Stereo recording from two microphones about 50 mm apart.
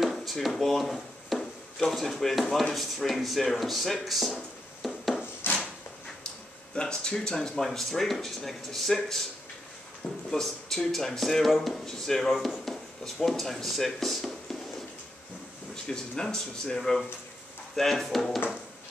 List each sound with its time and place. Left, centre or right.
0.0 s drawer open or close: centre
1.4 s speech: centre
4.8 s rub: centre
5.4 s a sound: left
6.7 s speech: centre
10.3 s speech: centre
15.7 s speech: centre